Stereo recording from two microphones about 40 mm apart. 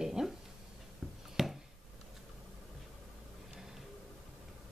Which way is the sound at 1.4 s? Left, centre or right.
Centre.